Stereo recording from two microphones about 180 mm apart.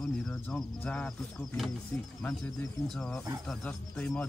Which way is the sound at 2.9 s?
Centre (ahead or behind).